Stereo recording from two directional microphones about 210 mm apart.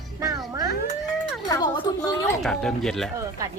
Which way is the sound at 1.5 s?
20° left (ahead or behind).